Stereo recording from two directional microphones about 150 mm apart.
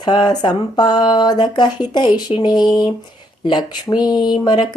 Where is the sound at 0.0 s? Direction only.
30° left (ahead or behind).